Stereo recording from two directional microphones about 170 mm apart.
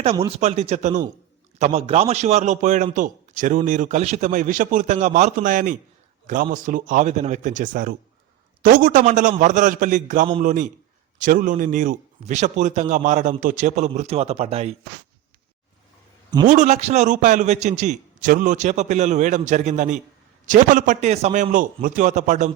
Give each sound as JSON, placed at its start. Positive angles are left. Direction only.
{"t": 0.3, "sound": "a man's voice", "side_deg": -40}
{"t": 16.5, "sound": "a man's voice", "side_deg": -45}